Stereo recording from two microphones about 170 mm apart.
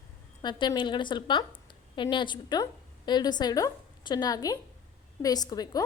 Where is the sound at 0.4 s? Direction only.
30° left (ahead or behind).